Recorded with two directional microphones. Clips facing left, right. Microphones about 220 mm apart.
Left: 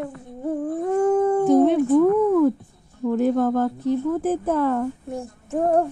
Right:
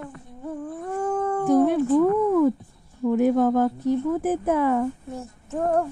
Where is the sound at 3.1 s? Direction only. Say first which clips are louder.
Even; 10° right (ahead or behind).